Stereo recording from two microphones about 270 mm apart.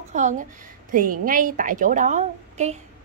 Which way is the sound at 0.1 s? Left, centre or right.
Right.